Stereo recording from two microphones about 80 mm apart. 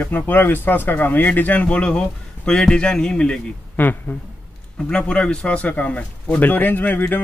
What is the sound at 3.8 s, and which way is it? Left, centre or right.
Speech, left.